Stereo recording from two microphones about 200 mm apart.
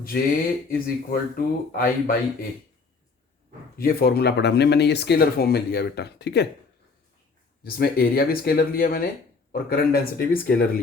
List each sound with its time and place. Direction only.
0.7 s speech: 45° left (ahead or behind)
3.8 s speech: 50° left (ahead or behind)
7.6 s speech: 50° left (ahead or behind)